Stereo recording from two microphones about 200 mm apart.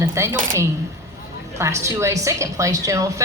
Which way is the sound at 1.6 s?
15° right (ahead or behind).